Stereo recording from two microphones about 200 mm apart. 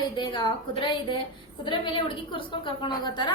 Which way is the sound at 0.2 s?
25° left (ahead or behind).